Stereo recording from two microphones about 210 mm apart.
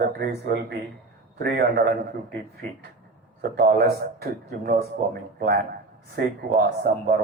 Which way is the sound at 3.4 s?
45° right (ahead or behind).